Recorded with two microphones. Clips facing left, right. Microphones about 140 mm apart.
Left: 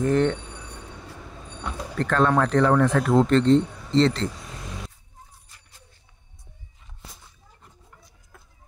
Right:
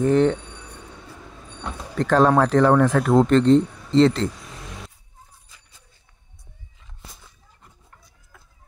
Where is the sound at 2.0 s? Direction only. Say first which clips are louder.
Right 4 dB; 35° right (ahead or behind).